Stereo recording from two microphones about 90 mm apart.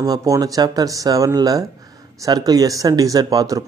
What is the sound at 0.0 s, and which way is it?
Speech, 45° right (ahead or behind).